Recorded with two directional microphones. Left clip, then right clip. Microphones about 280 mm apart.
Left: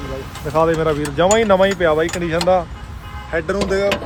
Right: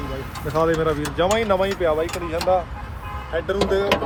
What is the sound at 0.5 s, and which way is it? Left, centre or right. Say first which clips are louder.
Speech: left 4 dB; left.